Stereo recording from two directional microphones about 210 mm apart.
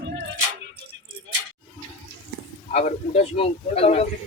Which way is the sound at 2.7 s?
30° left (ahead or behind).